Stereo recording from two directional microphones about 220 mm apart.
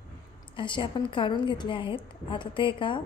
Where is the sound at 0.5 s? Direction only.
20° left (ahead or behind).